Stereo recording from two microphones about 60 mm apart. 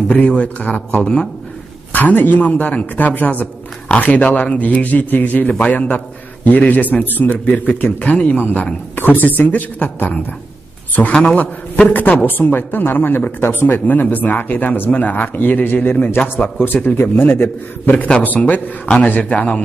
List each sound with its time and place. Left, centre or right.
0.3 s a man's voice: left
1.9 s a man's voice: left
11.0 s a man's voice: left
11.9 s a man's voice: left